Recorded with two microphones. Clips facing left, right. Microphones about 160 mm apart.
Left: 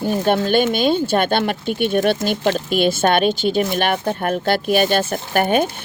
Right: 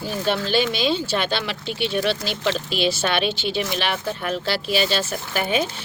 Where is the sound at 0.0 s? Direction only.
50° left (ahead or behind).